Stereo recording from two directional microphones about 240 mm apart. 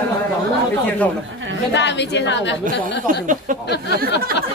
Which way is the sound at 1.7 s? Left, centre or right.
Left.